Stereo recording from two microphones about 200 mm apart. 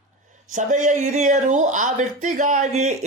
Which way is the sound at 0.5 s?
40° right (ahead or behind).